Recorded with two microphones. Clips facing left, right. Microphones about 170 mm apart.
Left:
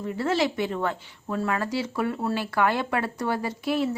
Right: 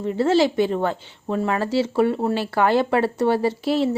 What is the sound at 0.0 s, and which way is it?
Speech, 25° right (ahead or behind).